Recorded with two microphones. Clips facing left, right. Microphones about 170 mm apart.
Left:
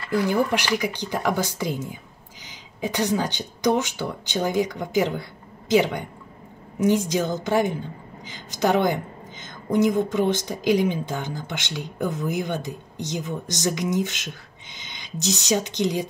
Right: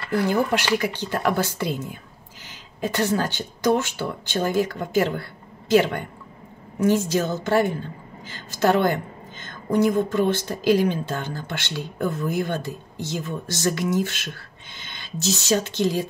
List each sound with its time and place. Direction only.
0.1 s a woman's voice: 15° left (ahead or behind)